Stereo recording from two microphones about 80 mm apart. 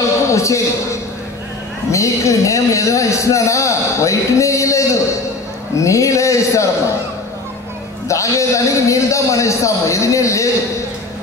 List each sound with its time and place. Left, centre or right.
0.3 s a sound: left
1.9 s speech: left
8.1 s speech: left